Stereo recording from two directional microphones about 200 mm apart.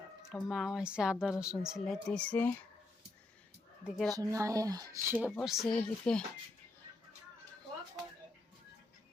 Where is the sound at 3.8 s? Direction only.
Centre (ahead or behind).